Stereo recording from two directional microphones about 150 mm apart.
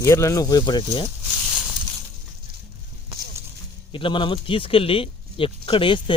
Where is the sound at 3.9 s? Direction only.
35° left (ahead or behind).